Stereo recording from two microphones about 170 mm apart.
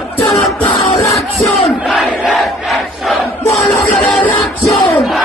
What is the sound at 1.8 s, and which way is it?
Crowd, 5° right (ahead or behind).